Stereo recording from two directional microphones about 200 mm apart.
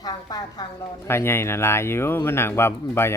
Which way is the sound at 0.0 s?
20° left (ahead or behind).